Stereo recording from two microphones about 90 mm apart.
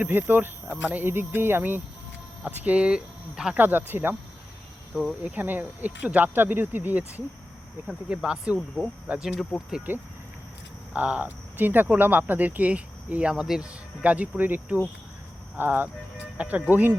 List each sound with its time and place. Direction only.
0.0 s speech: 20° right (ahead or behind)
3.6 s speech: 20° right (ahead or behind)
5.2 s speech: 20° right (ahead or behind)
7.9 s speech: 5° right (ahead or behind)
10.9 s speech: 15° right (ahead or behind)